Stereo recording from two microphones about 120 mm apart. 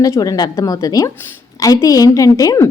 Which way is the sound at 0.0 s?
30° left (ahead or behind).